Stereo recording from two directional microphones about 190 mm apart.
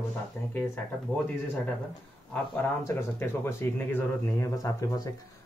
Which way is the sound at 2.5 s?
15° left (ahead or behind).